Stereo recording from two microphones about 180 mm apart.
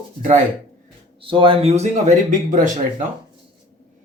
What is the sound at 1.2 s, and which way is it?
A man's voice, 30° right (ahead or behind).